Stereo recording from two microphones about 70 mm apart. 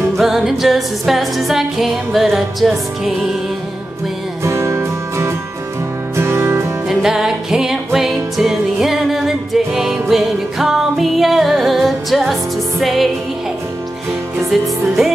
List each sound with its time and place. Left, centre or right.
0.2 s music: centre
4.4 s music: right
6.9 s music: centre